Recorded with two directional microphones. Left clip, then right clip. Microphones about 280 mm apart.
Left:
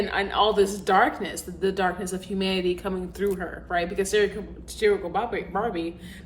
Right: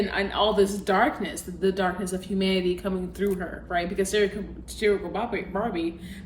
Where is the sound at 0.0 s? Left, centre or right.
Centre.